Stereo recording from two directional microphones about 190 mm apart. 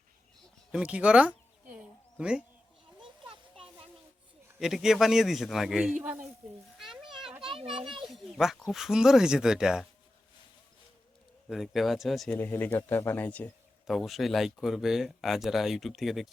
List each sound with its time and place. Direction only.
0.7 s speech: 5° right (ahead or behind)
1.7 s a sound: 5° right (ahead or behind)
4.6 s speech: centre (ahead or behind)
6.7 s a sound: centre (ahead or behind)
7.3 s children playing: 5° right (ahead or behind)
7.5 s a child's voice: 30° right (ahead or behind)
8.0 s speech: centre (ahead or behind)
11.4 s speech: centre (ahead or behind)